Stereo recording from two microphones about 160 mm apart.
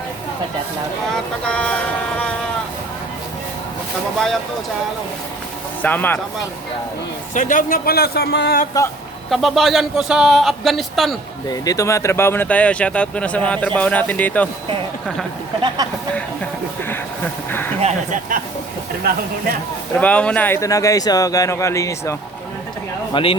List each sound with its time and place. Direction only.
1.1 s vehicle: 5° left (ahead or behind)
5.8 s speech: 10° left (ahead or behind)
7.3 s speech: 55° left (ahead or behind); by 8.5 s 90° left
8.7 s speech: 20° left (ahead or behind)
9.3 s a man's voice: centre (ahead or behind)
11.4 s speech: 25° left (ahead or behind)
15.8 s speech: 25° right (ahead or behind)
17.7 s speech: 45° right (ahead or behind)
20.0 s speech: 10° left (ahead or behind)
23.1 s speech: 35° left (ahead or behind)